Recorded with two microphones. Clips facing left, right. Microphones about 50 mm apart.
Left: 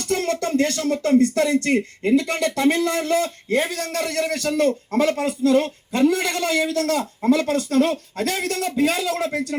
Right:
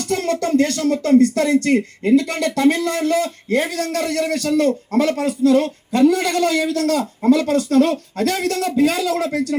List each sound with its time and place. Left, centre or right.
0.1 s a man's voice: left